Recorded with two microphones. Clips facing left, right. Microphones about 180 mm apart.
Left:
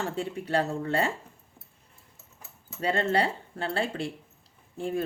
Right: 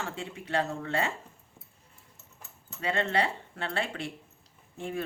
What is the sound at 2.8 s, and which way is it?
Speech, 35° left (ahead or behind).